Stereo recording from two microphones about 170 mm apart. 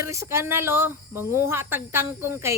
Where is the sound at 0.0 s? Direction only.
15° right (ahead or behind).